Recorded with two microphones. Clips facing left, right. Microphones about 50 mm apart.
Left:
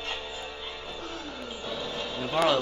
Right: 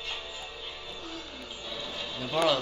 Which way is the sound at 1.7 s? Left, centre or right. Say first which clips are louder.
Left 4 dB; left.